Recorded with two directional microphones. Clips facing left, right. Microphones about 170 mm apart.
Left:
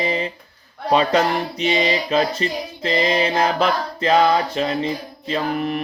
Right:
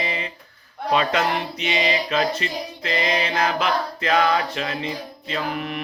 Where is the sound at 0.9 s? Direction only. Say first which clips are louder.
Left 4 dB; 35° left (ahead or behind).